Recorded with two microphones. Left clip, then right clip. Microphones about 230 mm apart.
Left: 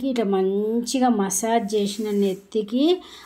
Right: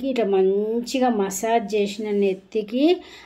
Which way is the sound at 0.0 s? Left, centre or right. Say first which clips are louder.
Right 2 dB; left.